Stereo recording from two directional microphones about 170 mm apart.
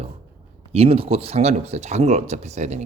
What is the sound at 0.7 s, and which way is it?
Speech, 35° right (ahead or behind).